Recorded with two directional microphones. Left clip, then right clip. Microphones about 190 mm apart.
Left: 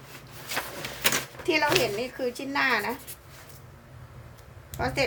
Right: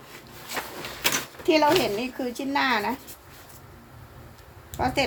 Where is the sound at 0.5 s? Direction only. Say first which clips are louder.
Even; 40° left (ahead or behind).